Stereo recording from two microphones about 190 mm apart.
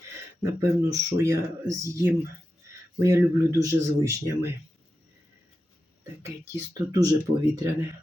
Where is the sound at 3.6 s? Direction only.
15° right (ahead or behind).